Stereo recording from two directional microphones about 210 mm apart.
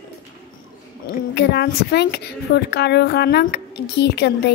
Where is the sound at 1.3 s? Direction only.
50° left (ahead or behind).